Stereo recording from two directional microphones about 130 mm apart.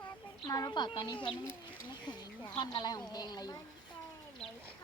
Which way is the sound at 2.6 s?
35° left (ahead or behind).